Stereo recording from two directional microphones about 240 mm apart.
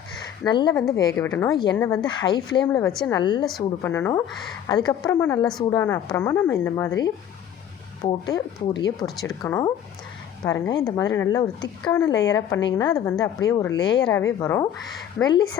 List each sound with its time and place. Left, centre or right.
0.4 s speech: centre